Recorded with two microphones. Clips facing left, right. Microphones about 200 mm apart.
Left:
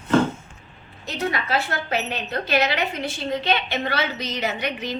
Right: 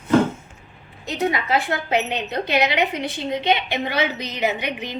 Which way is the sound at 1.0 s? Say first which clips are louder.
Right 3 dB; 20° right (ahead or behind).